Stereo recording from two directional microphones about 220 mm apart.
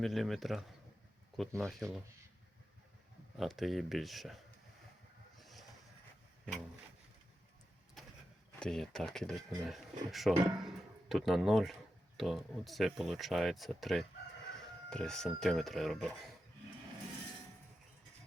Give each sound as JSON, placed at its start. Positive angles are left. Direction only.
{"t": 0.0, "sound": "speech", "side_deg": 0}
{"t": 3.3, "sound": "speech", "side_deg": 0}
{"t": 5.4, "sound": "vehicle", "side_deg": 0}
{"t": 8.5, "sound": "speech", "side_deg": 5}